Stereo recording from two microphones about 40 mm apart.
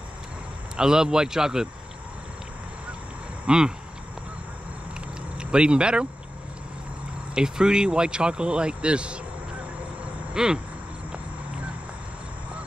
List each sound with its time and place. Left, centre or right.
0.7 s speech: centre
3.4 s a sound: centre
5.4 s speech: right
7.3 s speech: centre
10.3 s cricket: centre